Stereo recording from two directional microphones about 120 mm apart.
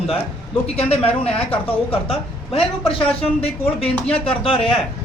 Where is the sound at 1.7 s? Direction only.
50° left (ahead or behind).